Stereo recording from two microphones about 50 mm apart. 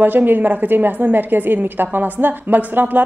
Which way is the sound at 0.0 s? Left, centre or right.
Right.